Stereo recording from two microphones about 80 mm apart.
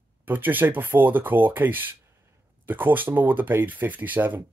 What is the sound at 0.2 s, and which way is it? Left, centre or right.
Speech, right.